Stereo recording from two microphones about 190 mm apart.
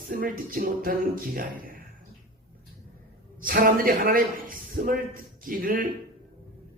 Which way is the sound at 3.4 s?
45° right (ahead or behind).